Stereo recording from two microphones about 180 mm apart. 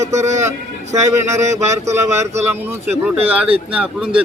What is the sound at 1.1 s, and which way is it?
Speech, 15° right (ahead or behind).